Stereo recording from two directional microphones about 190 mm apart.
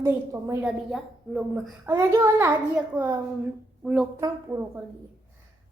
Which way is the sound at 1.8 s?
15° right (ahead or behind).